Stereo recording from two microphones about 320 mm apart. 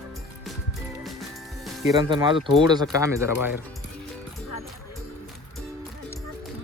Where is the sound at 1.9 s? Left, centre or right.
Centre.